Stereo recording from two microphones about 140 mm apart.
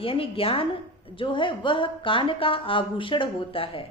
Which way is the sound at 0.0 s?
40° left (ahead or behind).